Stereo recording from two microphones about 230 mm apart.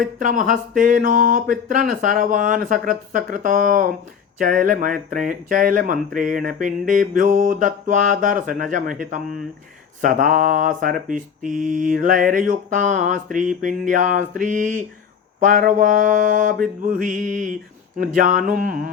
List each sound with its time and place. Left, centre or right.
0.2 s mantra: right